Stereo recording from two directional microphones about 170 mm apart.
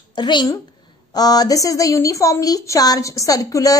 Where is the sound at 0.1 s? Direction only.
25° left (ahead or behind).